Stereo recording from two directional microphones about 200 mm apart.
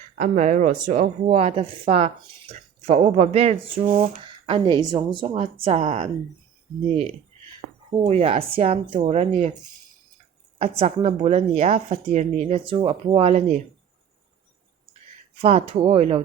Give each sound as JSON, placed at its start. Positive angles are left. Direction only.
{"t": 0.2, "sound": "a woman's voice", "side_deg": -40}
{"t": 7.9, "sound": "a woman's voice", "side_deg": -30}
{"t": 10.6, "sound": "a woman's voice", "side_deg": -30}
{"t": 15.4, "sound": "a woman's voice", "side_deg": -30}